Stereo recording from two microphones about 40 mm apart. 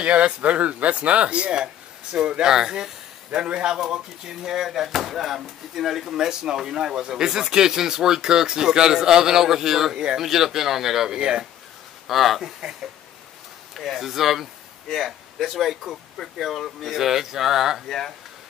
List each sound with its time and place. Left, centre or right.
0.0 s speech: right; by 11.1 s centre
11.1 s speech: right
12.1 s speech: centre
13.7 s speech: centre
17.8 s speech: centre